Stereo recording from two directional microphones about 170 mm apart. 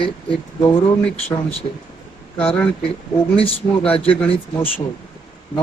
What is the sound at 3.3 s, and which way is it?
Speech, 35° left (ahead or behind).